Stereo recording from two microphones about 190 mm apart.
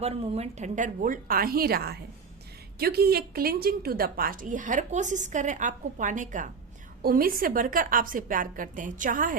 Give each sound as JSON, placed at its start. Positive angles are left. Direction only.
{"t": 0.0, "sound": "a woman's voice", "side_deg": -35}